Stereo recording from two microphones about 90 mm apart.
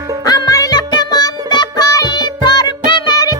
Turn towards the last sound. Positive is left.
turn(degrees=50)  # may be behind; listen again after turning